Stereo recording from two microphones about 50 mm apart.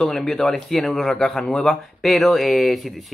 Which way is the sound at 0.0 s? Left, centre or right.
Centre.